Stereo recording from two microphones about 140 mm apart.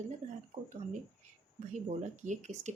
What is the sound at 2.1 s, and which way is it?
Speech, 60° right (ahead or behind).